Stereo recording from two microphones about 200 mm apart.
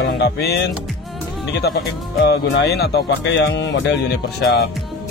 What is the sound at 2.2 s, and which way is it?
Speech, 55° left (ahead or behind).